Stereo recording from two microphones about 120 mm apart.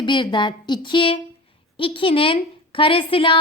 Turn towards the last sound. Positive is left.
turn(degrees=50)  # may be behind; listen again after turning